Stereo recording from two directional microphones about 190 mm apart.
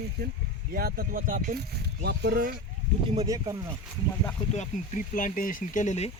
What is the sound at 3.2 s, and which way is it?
Speech, 20° right (ahead or behind).